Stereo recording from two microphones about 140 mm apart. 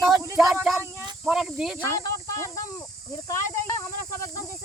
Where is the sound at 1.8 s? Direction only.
20° left (ahead or behind).